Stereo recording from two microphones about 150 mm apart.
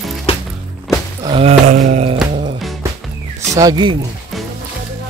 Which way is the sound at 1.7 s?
55° right (ahead or behind).